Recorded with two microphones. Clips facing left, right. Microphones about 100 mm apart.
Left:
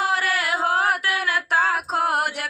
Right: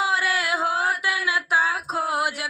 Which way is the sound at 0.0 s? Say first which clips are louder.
Left 1 dB; 65° left (ahead or behind).